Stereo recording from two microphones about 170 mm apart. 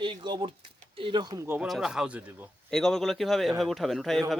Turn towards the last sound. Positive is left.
turn(degrees=0)  # may be behind; listen again after turning